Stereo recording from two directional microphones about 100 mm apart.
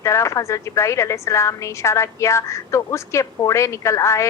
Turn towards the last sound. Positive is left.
turn(degrees=30)  # may be behind; listen again after turning